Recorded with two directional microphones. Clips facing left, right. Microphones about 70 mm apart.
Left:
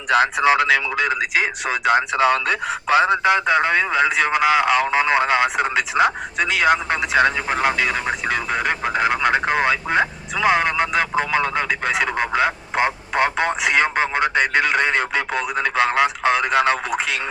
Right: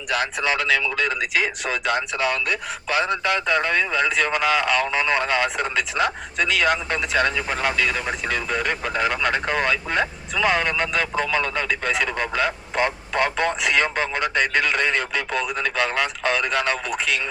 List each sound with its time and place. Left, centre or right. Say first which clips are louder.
0.3 s speech: left 6 dB; left
1.9 s speech: left 8 dB; left
7.5 s speech: left 3 dB; left